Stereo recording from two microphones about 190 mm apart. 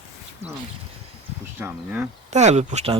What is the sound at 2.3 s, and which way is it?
Speech, 35° right (ahead or behind).